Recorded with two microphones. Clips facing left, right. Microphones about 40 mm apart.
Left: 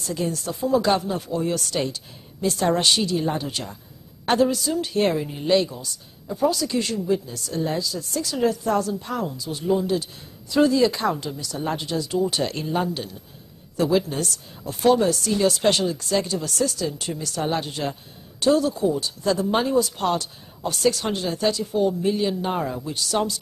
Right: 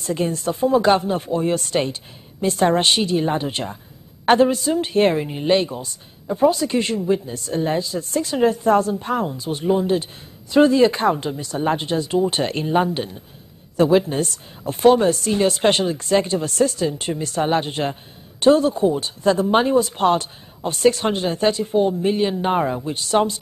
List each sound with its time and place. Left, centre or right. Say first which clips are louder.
0.0 s a woman's voice: right 5 dB; right